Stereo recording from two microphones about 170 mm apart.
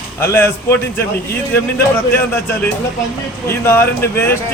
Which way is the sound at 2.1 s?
10° left (ahead or behind).